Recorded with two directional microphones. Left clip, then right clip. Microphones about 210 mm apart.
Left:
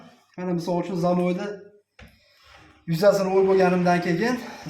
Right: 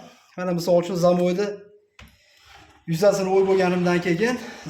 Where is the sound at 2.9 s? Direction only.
5° right (ahead or behind).